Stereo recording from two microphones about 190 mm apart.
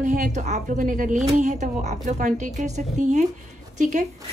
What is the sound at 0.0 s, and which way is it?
Speech, 40° right (ahead or behind).